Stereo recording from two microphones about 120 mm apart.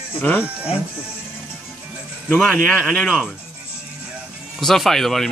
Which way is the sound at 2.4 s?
10° left (ahead or behind).